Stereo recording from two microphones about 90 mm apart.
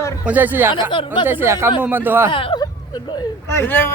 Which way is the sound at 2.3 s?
70° left (ahead or behind).